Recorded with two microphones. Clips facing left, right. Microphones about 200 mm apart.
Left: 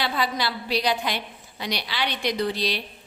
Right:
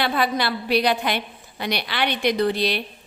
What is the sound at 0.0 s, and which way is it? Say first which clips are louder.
A woman's voice: right 4 dB; 60° right (ahead or behind).